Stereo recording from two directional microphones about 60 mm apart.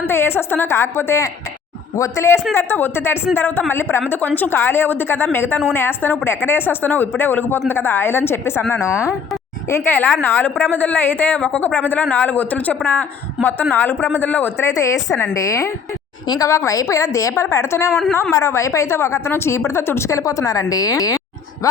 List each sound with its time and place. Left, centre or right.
0.1 s a woman's voice: left
2.6 s a woman's voice: left
8.8 s a woman's voice: left
11.3 s a woman's voice: left
11.7 s a woman's voice: left
14.6 s a woman's voice: left